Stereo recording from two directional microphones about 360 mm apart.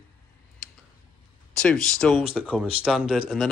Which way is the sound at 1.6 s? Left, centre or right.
Centre.